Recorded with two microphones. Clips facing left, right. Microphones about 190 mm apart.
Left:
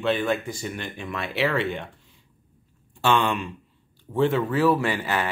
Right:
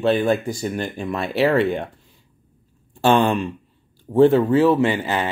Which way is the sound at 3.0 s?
35° right (ahead or behind).